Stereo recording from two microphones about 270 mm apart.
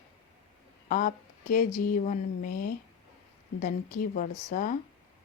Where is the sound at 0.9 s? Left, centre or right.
Left.